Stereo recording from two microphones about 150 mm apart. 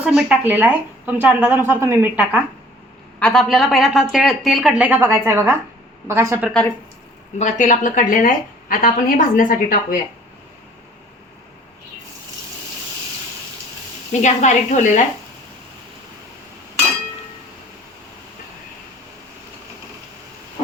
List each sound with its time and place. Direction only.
0.0 s a woman's voice: 5° right (ahead or behind)
3.2 s a woman's voice: 5° left (ahead or behind); by 6.5 s 15° right (ahead or behind)
6.5 s speech: 10° left (ahead or behind)
7.3 s a woman's voice: 55° left (ahead or behind)
14.1 s a woman's voice: 55° left (ahead or behind)